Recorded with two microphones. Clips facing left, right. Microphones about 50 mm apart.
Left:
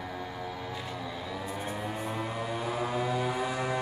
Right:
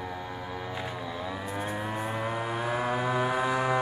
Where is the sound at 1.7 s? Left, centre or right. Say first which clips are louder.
Right 2 dB; right.